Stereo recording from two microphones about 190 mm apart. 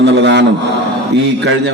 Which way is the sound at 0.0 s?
65° right (ahead or behind).